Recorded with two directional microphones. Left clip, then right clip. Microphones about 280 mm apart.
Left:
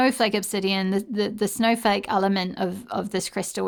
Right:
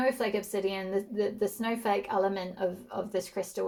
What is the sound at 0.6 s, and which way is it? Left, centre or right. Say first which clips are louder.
Speech: left 6 dB; left.